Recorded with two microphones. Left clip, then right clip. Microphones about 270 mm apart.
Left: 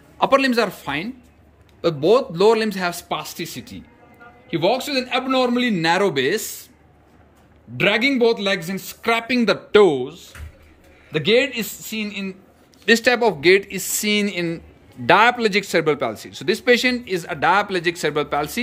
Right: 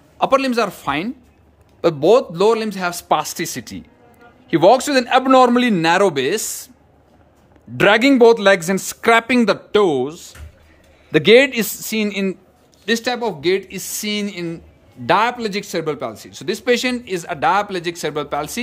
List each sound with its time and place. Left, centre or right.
0.2 s a man's voice: centre
7.7 s a man's voice: centre
9.9 s a man's voice: centre
12.8 s speech: centre